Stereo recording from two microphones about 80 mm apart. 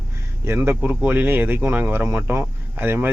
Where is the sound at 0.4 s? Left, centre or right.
Right.